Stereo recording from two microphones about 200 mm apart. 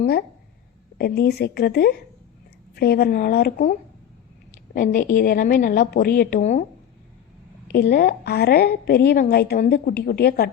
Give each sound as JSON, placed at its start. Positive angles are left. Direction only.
{"t": 0.0, "sound": "a woman's voice", "side_deg": 50}
{"t": 7.7, "sound": "a woman's voice", "side_deg": 50}